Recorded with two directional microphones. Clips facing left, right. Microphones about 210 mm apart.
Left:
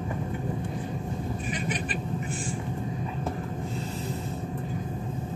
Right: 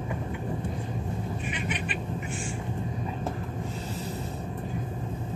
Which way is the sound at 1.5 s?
35° left (ahead or behind).